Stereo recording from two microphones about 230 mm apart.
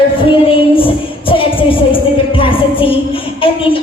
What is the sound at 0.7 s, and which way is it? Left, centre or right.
Music, left.